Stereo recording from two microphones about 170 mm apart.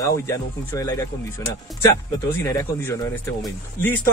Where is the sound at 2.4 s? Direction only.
15° left (ahead or behind).